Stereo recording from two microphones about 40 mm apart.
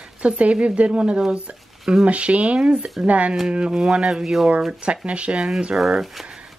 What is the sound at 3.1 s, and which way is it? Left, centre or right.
Speech, right.